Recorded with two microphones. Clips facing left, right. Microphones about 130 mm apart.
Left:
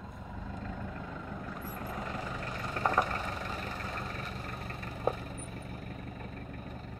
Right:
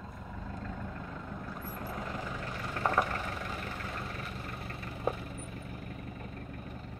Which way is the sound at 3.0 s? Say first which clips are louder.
Even; 25° left (ahead or behind).